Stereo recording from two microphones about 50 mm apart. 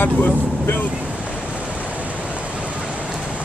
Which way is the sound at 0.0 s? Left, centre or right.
Left.